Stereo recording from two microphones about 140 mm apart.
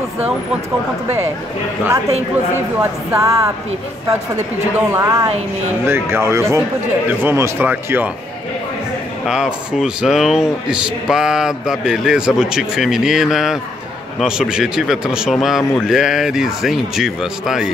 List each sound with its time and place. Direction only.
2.8 s speech: 20° right (ahead or behind)
4.7 s speech: 20° right (ahead or behind)
9.2 s speech: 5° right (ahead or behind)